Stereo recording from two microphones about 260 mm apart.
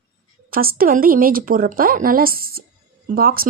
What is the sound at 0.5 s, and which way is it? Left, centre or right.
Speech, right.